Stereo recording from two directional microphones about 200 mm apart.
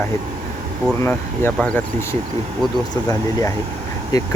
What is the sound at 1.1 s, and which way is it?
Speech, 10° left (ahead or behind).